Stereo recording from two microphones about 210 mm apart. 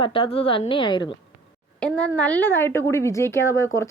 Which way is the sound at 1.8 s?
5° left (ahead or behind).